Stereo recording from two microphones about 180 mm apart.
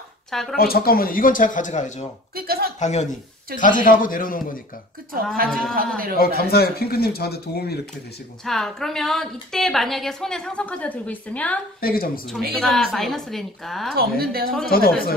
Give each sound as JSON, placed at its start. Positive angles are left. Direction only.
{"t": 0.3, "sound": "speech", "side_deg": 0}
{"t": 0.6, "sound": "speech", "side_deg": 55}
{"t": 2.3, "sound": "a sound", "side_deg": -60}
{"t": 2.8, "sound": "speech", "side_deg": 40}
{"t": 5.1, "sound": "speech", "side_deg": -55}
{"t": 5.5, "sound": "a woman's voice", "side_deg": 0}
{"t": 6.1, "sound": "speech", "side_deg": 60}
{"t": 8.5, "sound": "a woman's voice", "side_deg": 0}
{"t": 11.8, "sound": "speech", "side_deg": 55}
{"t": 12.5, "sound": "a woman's voice", "side_deg": 0}
{"t": 13.9, "sound": "speech", "side_deg": -60}
{"t": 14.7, "sound": "speech", "side_deg": 55}